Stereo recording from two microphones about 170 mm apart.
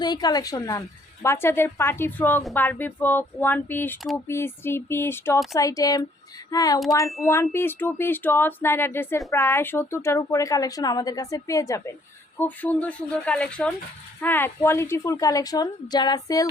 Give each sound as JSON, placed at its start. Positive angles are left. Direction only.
{"t": 0.0, "sound": "a woman's voice", "side_deg": 25}